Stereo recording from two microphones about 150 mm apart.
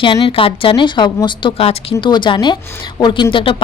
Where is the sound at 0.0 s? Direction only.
35° left (ahead or behind).